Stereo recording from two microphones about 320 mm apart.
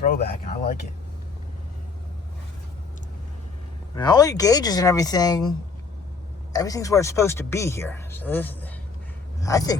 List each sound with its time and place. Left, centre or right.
0.0 s speech: left
3.9 s speech: centre